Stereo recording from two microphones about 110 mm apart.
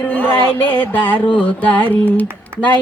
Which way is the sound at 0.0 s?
20° left (ahead or behind).